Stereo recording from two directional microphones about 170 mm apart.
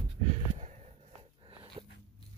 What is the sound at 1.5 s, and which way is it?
Dog, 35° right (ahead or behind).